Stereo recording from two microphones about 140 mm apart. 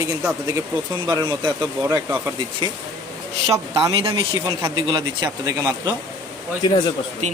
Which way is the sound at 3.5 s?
20° right (ahead or behind).